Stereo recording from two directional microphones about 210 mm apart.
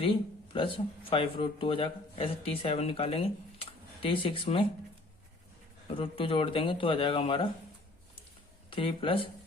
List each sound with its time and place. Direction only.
0.0 s speech: 25° left (ahead or behind)
6.0 s speech: 25° left (ahead or behind)
8.7 s speech: 25° left (ahead or behind)